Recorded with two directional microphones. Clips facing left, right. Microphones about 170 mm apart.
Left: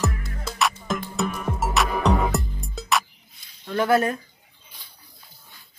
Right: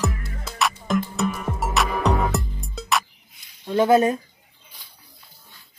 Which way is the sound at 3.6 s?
20° right (ahead or behind).